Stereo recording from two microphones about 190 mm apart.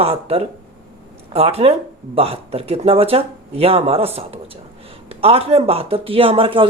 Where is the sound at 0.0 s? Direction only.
30° right (ahead or behind).